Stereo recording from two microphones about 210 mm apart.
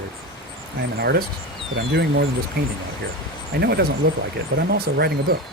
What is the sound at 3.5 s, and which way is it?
Speech, 50° right (ahead or behind).